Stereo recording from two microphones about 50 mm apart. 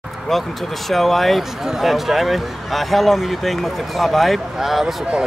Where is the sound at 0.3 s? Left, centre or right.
Centre.